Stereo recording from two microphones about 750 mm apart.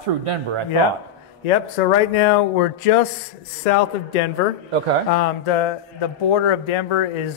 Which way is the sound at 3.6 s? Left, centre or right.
Left.